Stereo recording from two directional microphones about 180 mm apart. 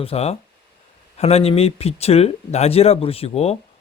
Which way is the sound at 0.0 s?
35° left (ahead or behind).